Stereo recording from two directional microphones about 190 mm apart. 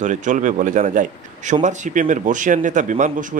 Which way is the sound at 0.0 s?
40° right (ahead or behind).